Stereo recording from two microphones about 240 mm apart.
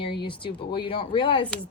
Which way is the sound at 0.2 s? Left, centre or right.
Left.